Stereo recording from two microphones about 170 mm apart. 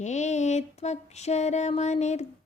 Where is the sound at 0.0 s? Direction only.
45° left (ahead or behind).